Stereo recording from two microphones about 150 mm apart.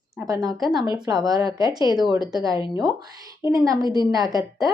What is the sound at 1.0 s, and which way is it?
Speech, 25° right (ahead or behind).